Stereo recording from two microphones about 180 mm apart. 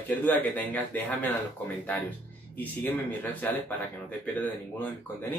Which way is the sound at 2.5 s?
10° left (ahead or behind).